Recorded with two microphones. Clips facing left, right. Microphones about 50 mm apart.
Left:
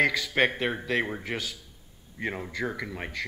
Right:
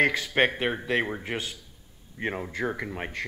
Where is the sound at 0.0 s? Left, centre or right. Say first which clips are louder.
Right 1 dB; right.